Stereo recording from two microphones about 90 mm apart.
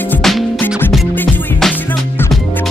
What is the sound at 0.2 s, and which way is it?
Music, centre (ahead or behind).